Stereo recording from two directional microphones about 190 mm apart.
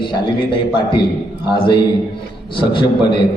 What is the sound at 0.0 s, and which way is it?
A man's voice, 25° left (ahead or behind).